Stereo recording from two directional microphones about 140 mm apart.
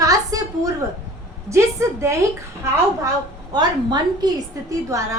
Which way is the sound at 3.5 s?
30° right (ahead or behind).